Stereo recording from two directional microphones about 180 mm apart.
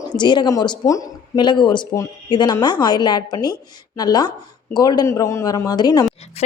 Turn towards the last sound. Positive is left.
turn(degrees=35)  # may be behind; listen again after turning